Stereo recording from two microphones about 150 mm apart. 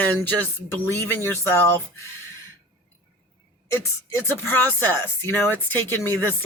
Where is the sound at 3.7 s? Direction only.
15° left (ahead or behind).